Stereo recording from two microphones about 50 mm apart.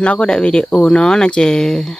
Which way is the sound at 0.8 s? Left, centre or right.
Centre.